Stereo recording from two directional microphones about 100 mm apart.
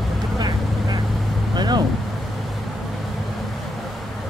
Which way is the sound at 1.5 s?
45° right (ahead or behind).